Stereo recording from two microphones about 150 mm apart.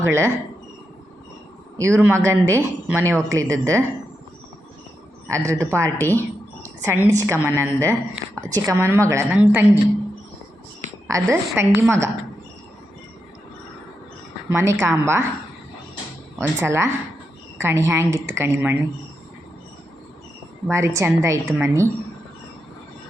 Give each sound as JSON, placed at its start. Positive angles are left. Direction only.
{"t": 0.0, "sound": "a woman's voice", "side_deg": -15}
{"t": 1.8, "sound": "speech", "side_deg": -15}
{"t": 5.5, "sound": "speech", "side_deg": -20}
{"t": 6.0, "sound": "speech", "side_deg": 10}
{"t": 6.6, "sound": "a woman's voice", "side_deg": -15}
{"t": 11.1, "sound": "a woman's voice", "side_deg": -20}
{"t": 14.5, "sound": "a woman's voice", "side_deg": -20}
{"t": 16.4, "sound": "a woman's voice", "side_deg": -15}
{"t": 20.7, "sound": "a woman's voice", "side_deg": -20}